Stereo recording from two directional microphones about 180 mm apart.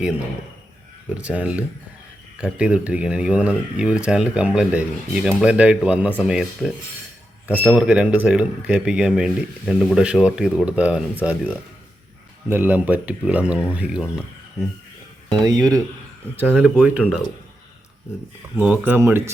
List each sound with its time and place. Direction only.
1.1 s speech: 10° right (ahead or behind)
15.3 s speech: 25° right (ahead or behind)
16.4 s speech: 10° right (ahead or behind)
18.5 s speech: 10° right (ahead or behind)